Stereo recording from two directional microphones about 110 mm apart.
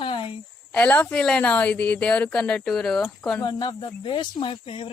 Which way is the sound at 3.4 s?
45° left (ahead or behind).